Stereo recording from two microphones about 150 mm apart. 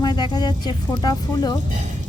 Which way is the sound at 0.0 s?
30° left (ahead or behind).